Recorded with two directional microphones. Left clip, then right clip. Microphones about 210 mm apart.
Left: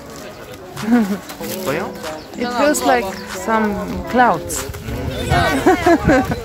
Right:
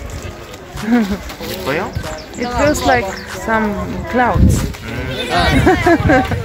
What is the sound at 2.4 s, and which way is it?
Speech, 20° left (ahead or behind).